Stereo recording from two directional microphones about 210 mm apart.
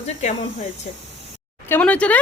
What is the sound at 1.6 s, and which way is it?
Speech, 10° left (ahead or behind).